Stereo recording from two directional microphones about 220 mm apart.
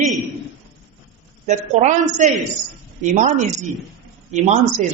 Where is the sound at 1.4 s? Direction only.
30° right (ahead or behind).